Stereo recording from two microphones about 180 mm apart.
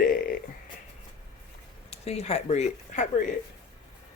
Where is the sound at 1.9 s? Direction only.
35° left (ahead or behind).